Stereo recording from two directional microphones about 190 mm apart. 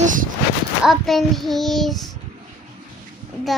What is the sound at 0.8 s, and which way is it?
A child's voice, centre (ahead or behind).